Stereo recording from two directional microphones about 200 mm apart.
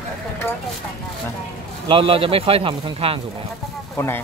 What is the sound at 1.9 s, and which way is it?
Speech, 25° right (ahead or behind).